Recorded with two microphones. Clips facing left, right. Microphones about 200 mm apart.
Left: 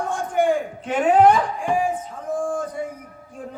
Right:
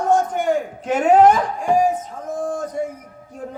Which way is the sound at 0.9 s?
40° right (ahead or behind).